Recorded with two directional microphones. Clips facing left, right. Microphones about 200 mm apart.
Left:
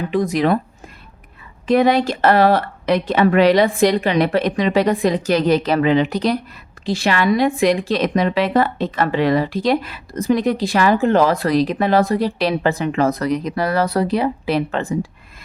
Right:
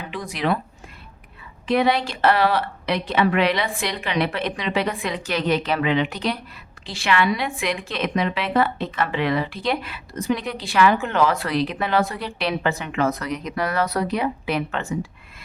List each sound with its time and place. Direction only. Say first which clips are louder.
0.1 s speech: left 7 dB; 45° left (ahead or behind)
1.6 s speech: left 5 dB; 45° left (ahead or behind)